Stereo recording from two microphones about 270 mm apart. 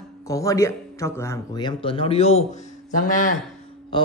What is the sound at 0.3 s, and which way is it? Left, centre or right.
Speech, centre.